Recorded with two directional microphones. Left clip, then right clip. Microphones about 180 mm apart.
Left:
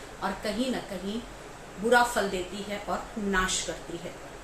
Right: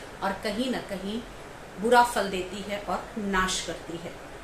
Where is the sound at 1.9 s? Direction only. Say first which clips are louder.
Right 2 dB; 15° right (ahead or behind).